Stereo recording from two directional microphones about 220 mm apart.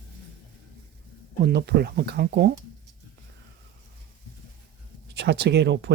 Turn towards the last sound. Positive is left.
turn(degrees=-50)  # may be behind; listen again after turning